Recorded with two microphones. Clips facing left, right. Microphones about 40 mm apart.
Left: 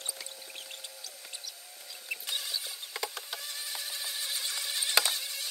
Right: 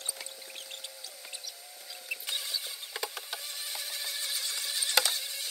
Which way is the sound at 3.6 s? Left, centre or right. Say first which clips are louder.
Even; centre.